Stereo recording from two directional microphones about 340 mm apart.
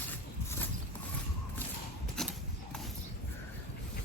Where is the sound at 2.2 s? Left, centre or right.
Centre.